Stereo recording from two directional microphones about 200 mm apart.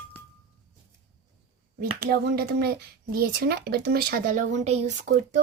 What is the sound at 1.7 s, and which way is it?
Speech, 50° right (ahead or behind).